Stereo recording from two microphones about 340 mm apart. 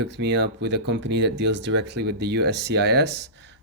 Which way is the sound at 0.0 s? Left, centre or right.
Right.